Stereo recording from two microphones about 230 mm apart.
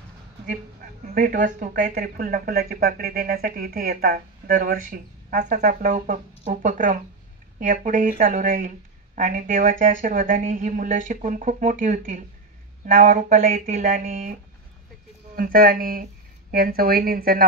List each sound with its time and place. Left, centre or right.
1.1 s speech: right
15.3 s speech: right